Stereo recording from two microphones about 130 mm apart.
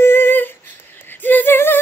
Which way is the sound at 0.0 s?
15° left (ahead or behind).